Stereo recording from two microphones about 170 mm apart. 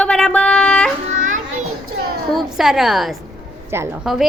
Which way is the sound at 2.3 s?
Centre (ahead or behind).